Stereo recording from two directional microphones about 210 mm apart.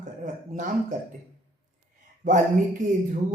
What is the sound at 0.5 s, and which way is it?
Speech, 35° right (ahead or behind).